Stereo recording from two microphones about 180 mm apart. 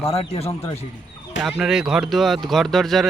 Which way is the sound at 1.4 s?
5° right (ahead or behind).